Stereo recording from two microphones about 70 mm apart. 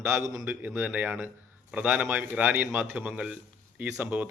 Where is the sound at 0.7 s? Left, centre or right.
Right.